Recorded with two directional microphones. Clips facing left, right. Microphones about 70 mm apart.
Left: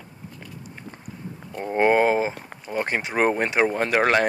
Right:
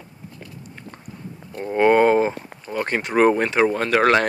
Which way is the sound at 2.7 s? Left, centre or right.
Centre.